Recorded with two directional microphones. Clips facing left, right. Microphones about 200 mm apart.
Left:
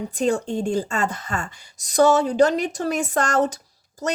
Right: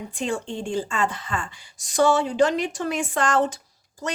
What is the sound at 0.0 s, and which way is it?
Speech, 40° left (ahead or behind).